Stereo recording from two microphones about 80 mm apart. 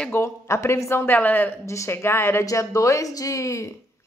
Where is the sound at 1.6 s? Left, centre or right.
Left.